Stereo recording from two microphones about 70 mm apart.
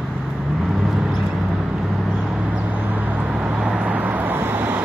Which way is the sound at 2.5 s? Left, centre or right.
Right.